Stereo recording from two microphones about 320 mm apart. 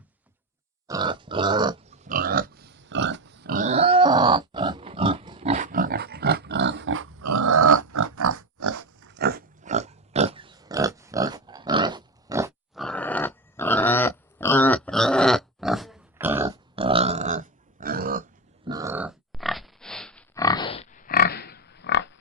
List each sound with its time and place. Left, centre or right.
0.9 s dog: centre
2.0 s pig: right
7.2 s dog: right
7.8 s pig: right
9.0 s pig: right; by 12.8 s centre
12.8 s pig: centre; by 18.3 s right
18.6 s grunt: centre; by 22.2 s left